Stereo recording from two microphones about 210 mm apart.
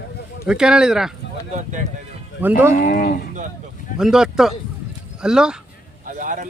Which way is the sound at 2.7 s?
40° left (ahead or behind).